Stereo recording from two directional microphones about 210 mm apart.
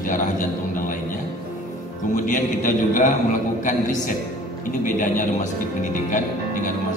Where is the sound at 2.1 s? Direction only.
35° left (ahead or behind).